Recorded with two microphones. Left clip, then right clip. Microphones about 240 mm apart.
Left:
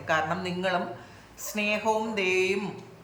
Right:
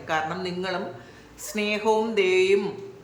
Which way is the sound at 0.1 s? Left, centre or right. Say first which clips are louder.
Even; centre.